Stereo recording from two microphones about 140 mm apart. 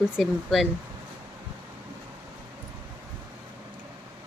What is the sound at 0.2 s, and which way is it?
Speech, centre (ahead or behind).